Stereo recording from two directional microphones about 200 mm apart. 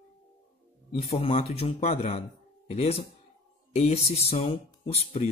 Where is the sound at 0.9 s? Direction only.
30° left (ahead or behind).